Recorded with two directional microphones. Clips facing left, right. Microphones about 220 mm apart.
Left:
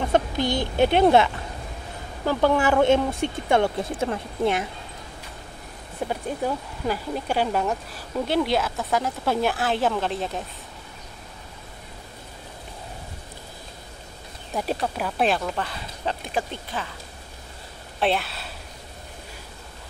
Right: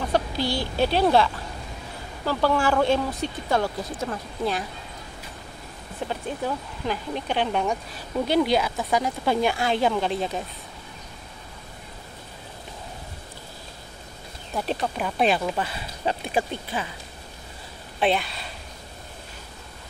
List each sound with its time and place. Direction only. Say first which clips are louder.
0.1 s speech: left 2 dB; 20° left (ahead or behind)
6.0 s speech: left 2 dB; 10° left (ahead or behind)
14.5 s speech: left 1 dB; 10° left (ahead or behind); by 16.8 s 10° right (ahead or behind)
18.0 s speech: right 1 dB; centre (ahead or behind)